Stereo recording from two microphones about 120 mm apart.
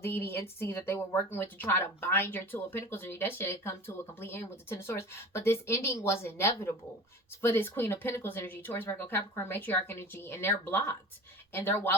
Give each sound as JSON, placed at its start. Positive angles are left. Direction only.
{"t": 0.0, "sound": "a woman's voice", "side_deg": 20}